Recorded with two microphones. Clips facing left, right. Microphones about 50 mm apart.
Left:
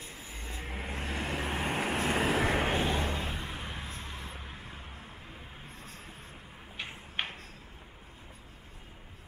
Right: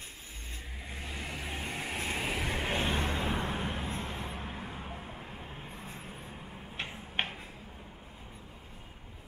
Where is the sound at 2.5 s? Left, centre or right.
Left.